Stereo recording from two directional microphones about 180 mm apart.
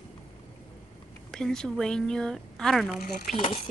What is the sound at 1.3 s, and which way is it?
Speech, 5° left (ahead or behind).